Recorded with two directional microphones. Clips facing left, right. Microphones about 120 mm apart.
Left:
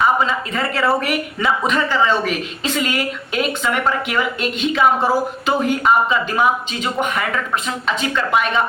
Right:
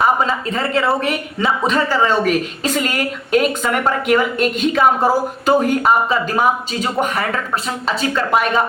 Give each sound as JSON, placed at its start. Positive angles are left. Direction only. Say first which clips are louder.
{"t": 0.0, "sound": "speech", "louder": "right 1 dB", "side_deg": -40}